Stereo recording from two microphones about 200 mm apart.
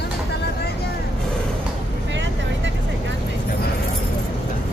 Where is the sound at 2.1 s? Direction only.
65° right (ahead or behind).